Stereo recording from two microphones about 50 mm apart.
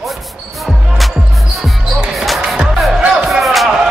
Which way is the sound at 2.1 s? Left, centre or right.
Centre.